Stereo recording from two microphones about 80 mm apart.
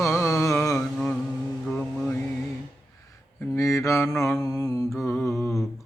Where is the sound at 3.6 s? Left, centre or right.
Left.